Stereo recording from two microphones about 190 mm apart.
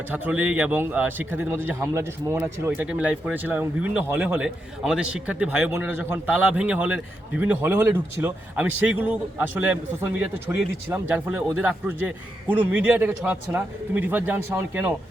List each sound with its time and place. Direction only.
0.1 s a man's voice: 10° right (ahead or behind)